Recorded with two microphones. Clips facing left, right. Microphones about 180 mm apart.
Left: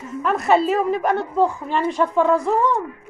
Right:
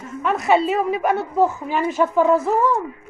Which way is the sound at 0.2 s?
Centre (ahead or behind).